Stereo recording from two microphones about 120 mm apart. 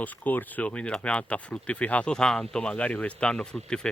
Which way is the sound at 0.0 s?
15° left (ahead or behind).